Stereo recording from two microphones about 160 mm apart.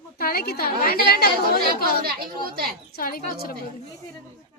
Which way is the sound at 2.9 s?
65° left (ahead or behind).